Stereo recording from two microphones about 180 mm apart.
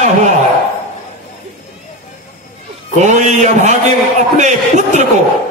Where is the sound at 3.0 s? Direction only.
40° right (ahead or behind).